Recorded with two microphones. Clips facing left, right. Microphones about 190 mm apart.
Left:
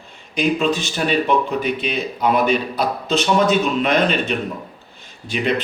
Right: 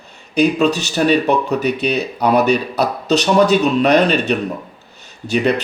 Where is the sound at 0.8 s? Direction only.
40° right (ahead or behind).